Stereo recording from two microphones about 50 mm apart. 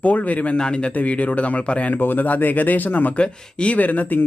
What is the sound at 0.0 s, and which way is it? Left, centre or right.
Speech, left.